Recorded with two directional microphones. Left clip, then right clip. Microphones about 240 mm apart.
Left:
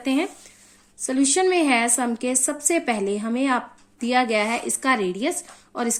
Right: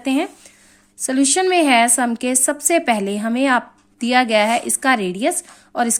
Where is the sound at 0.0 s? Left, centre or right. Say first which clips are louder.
Right 3 dB; right.